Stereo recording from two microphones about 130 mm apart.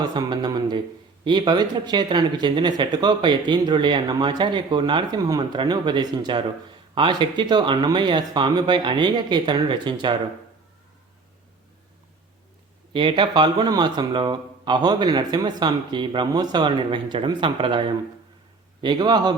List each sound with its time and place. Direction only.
0.0 s speech: 35° right (ahead or behind)
12.9 s speech: 40° right (ahead or behind)